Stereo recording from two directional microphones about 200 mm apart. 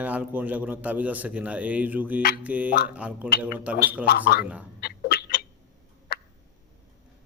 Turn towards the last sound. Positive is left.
turn(degrees=50)  # may be behind; listen again after turning